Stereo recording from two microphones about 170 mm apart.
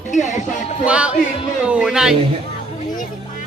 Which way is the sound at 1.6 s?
5° right (ahead or behind).